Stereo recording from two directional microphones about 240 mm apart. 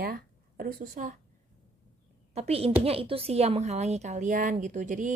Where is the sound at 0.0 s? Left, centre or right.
Right.